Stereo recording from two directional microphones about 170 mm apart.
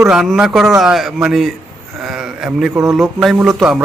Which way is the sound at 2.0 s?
5° right (ahead or behind).